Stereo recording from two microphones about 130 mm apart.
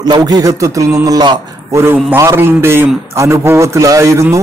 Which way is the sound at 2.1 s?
20° right (ahead or behind).